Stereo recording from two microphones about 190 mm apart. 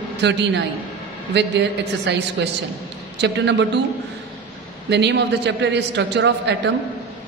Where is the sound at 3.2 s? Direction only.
65° right (ahead or behind).